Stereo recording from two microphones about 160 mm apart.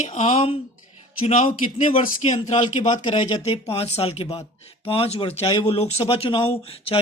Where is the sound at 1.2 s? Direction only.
50° left (ahead or behind).